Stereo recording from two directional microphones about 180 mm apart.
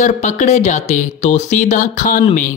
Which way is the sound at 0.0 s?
40° left (ahead or behind).